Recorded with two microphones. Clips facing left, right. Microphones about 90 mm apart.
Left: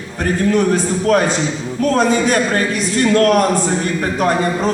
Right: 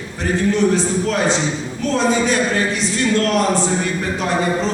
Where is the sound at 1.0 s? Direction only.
50° left (ahead or behind).